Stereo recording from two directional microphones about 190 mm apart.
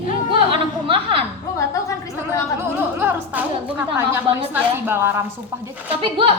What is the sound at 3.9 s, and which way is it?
A woman's voice, 10° right (ahead or behind).